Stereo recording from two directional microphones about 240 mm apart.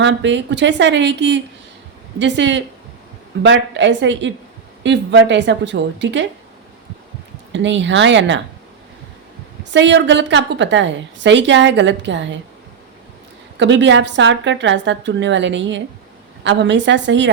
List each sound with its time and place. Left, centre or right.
0.0 s a woman's voice: right
7.5 s a woman's voice: right
9.7 s a woman's voice: right
13.6 s a woman's voice: right